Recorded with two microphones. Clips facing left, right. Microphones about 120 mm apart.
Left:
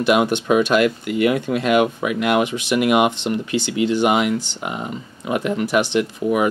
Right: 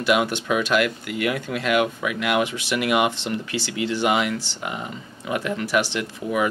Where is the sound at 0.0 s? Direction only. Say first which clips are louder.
Left 4 dB; 25° left (ahead or behind).